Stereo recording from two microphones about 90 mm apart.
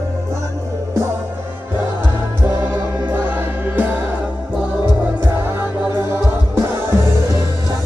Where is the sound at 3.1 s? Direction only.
20° right (ahead or behind).